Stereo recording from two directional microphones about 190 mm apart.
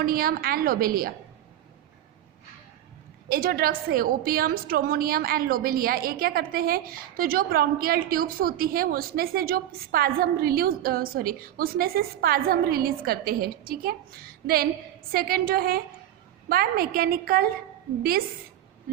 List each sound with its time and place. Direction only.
0.0 s a woman's voice: 50° right (ahead or behind)
3.2 s a woman's voice: 50° right (ahead or behind)